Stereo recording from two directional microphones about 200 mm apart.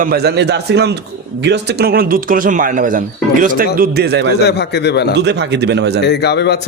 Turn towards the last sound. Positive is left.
turn(degrees=55)  # may be behind; listen again after turning